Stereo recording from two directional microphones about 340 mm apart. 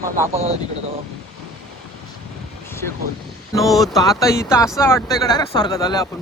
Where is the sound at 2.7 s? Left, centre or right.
Centre.